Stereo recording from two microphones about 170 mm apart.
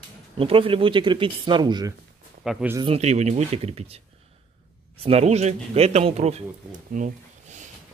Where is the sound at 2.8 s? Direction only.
35° right (ahead or behind).